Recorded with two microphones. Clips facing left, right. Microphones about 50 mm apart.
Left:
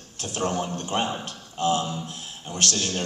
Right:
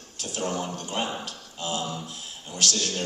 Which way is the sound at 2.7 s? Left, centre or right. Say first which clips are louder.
Left 2 dB; left.